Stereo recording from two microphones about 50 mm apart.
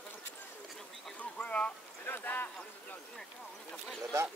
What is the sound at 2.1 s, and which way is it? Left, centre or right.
Speech, left.